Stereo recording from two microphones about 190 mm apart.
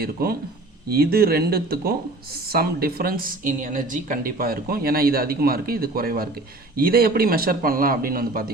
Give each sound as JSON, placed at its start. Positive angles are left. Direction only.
{"t": 0.0, "sound": "a woman's voice", "side_deg": -55}